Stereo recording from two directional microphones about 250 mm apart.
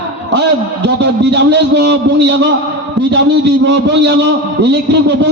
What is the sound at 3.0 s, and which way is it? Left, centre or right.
A man's voice, right.